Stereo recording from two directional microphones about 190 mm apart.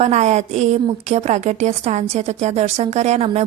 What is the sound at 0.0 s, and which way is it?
A woman's voice, 35° right (ahead or behind).